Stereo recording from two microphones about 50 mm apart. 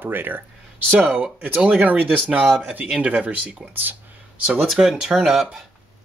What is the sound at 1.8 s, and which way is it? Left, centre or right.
Speech, right.